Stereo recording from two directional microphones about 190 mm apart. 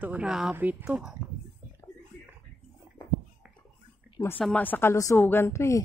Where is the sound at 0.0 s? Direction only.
5° right (ahead or behind).